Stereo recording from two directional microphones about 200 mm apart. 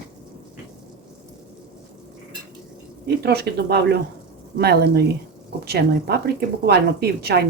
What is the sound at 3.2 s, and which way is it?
A woman's voice, 50° right (ahead or behind).